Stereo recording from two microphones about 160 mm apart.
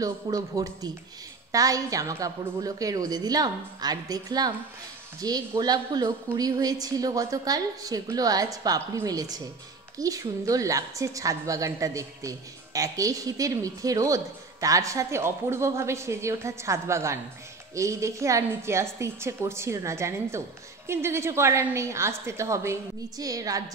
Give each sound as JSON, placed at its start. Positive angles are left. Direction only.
{"t": 0.0, "sound": "a woman's voice", "side_deg": -20}